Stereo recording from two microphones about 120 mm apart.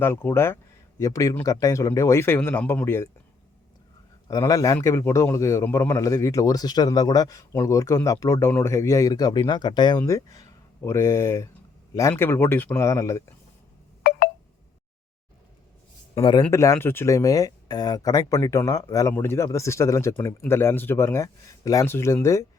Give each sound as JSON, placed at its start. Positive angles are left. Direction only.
{"t": 0.0, "sound": "a man's voice", "side_deg": 20}
{"t": 4.3, "sound": "a man's voice", "side_deg": 30}
{"t": 10.0, "sound": "a man's voice", "side_deg": 25}
{"t": 16.5, "sound": "a man's voice", "side_deg": 25}